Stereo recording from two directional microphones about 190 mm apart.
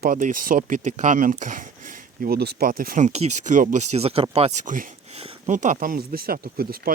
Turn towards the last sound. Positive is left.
turn(degrees=-50)  # may be behind; listen again after turning